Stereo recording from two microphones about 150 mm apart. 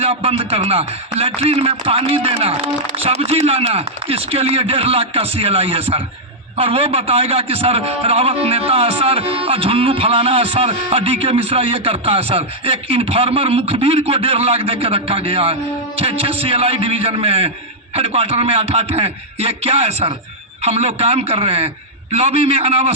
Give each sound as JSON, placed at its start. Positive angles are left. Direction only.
{"t": 0.0, "sound": "a man's voice", "side_deg": -40}